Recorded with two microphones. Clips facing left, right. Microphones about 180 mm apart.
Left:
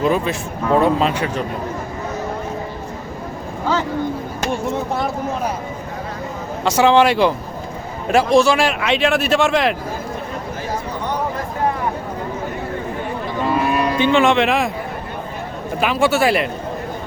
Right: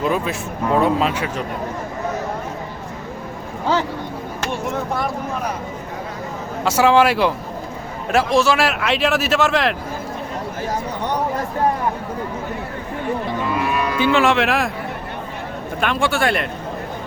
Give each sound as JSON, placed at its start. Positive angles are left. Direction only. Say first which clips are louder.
{"t": 0.0, "sound": "speech", "louder": "left 3 dB", "side_deg": 0}
{"t": 6.7, "sound": "speech", "louder": "left 1 dB", "side_deg": -5}
{"t": 13.5, "sound": "a sound", "louder": "left 5 dB", "side_deg": 35}
{"t": 14.1, "sound": "speech", "louder": "left 1 dB", "side_deg": 0}
{"t": 15.8, "sound": "speech", "louder": "left 3 dB", "side_deg": 5}